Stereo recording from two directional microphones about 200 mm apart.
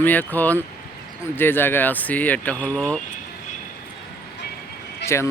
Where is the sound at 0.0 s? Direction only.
10° left (ahead or behind).